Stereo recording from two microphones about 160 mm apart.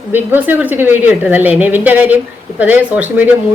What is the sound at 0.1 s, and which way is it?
A woman's voice, 10° right (ahead or behind).